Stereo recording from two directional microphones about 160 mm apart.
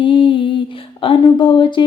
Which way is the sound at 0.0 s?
30° left (ahead or behind).